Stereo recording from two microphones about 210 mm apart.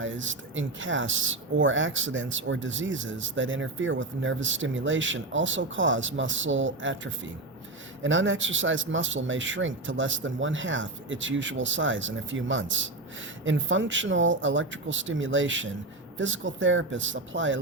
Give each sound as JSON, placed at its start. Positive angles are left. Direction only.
{"t": 0.0, "sound": "speech", "side_deg": -65}